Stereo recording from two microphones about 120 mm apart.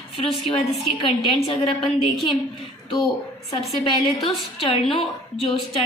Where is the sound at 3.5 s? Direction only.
60° left (ahead or behind).